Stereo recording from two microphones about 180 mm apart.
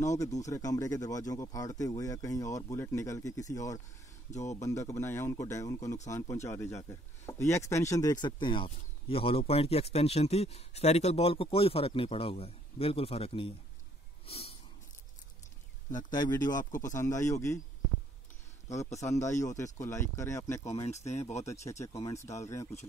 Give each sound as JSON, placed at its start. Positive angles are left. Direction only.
{"t": 0.4, "sound": "speech", "side_deg": 20}
{"t": 14.2, "sound": "snort", "side_deg": 30}
{"t": 16.1, "sound": "speech", "side_deg": 25}
{"t": 16.7, "sound": "speech", "side_deg": 45}
{"t": 17.0, "sound": "speech", "side_deg": 15}
{"t": 18.9, "sound": "speech", "side_deg": 15}
{"t": 20.7, "sound": "speech", "side_deg": 35}
{"t": 21.6, "sound": "speech", "side_deg": 15}